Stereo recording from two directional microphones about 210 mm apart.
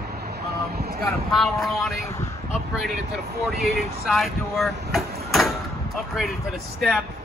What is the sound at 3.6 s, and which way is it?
Speech, centre (ahead or behind).